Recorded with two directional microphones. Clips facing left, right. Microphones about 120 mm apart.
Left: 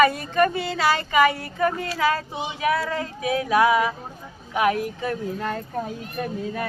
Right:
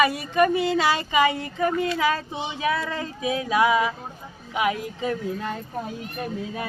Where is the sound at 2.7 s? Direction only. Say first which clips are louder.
Left 3 dB; 35° left (ahead or behind).